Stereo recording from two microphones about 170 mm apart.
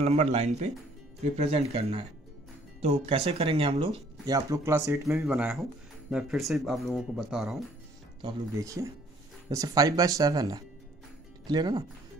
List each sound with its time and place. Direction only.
0.0 s speech: 40° right (ahead or behind)
4.3 s speech: 15° right (ahead or behind)
5.2 s speech: 5° right (ahead or behind)
8.2 s speech: 20° right (ahead or behind)